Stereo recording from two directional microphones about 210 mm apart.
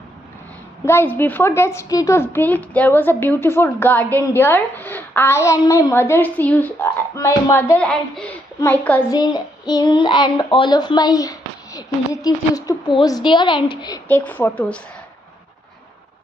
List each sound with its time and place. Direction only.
0.8 s a woman's voice: 10° left (ahead or behind)
9.1 s a child's voice: 20° left (ahead or behind)
14.0 s a woman's voice: 10° left (ahead or behind)